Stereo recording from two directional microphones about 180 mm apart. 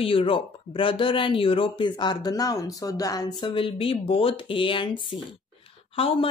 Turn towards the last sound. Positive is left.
turn(degrees=30)  # may be behind; listen again after turning